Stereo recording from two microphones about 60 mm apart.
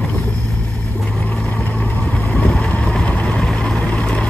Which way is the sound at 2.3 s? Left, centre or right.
Left.